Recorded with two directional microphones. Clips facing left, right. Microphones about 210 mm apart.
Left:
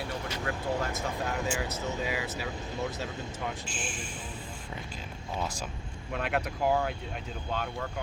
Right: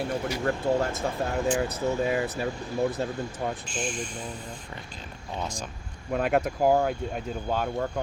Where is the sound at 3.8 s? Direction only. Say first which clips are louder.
Right 10 dB; 40° right (ahead or behind).